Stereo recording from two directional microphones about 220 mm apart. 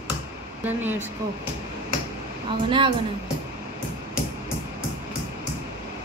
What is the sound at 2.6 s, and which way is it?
Speech, 20° right (ahead or behind).